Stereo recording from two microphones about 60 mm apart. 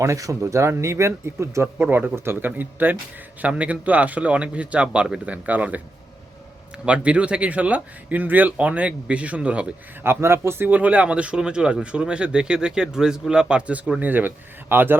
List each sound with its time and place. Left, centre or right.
0.0 s speech: right
0.4 s speech: right
1.6 s speech: right; by 5.2 s centre
5.2 s speech: right
6.8 s speech: centre
10.0 s speech: right
10.7 s speech: right
14.0 s speech: right